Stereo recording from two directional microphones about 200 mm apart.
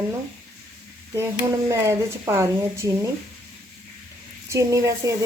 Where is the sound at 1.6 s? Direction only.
15° right (ahead or behind).